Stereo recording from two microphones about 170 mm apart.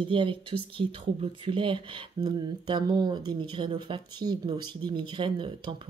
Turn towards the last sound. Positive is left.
turn(degrees=-30)  # may be behind; listen again after turning